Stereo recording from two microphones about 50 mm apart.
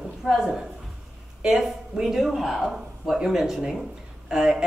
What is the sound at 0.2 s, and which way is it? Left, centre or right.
Speech, centre.